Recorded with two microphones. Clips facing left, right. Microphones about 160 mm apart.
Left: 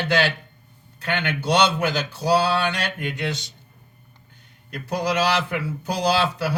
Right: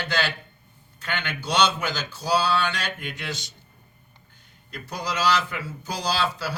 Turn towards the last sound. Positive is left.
turn(degrees=60)  # may be behind; listen again after turning